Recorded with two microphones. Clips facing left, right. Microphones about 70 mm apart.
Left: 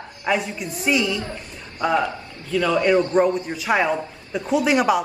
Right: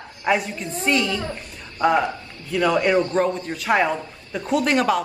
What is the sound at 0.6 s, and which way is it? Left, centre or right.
Speech, centre.